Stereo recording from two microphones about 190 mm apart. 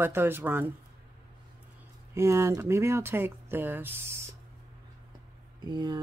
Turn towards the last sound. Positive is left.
turn(degrees=-25)  # may be behind; listen again after turning